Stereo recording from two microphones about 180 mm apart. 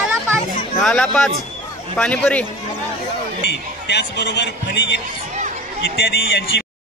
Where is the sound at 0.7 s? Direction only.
5° left (ahead or behind).